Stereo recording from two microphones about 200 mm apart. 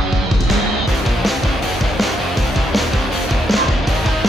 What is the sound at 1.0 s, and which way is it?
Music, centre (ahead or behind).